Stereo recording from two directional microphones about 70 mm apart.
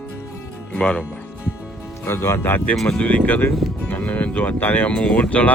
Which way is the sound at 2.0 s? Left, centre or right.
Left.